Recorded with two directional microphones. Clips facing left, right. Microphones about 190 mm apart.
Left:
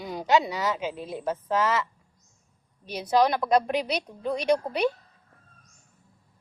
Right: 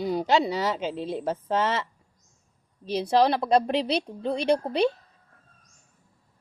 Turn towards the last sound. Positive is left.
turn(degrees=-30)  # may be behind; listen again after turning